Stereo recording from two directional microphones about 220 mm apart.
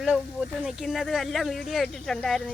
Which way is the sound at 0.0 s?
Centre (ahead or behind).